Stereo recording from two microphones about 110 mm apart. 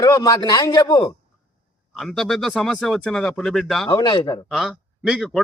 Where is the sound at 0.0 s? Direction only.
35° left (ahead or behind).